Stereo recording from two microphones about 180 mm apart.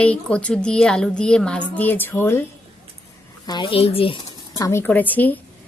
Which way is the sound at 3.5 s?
25° left (ahead or behind).